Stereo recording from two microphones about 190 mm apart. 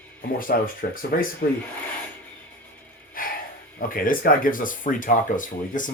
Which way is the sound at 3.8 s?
45° left (ahead or behind).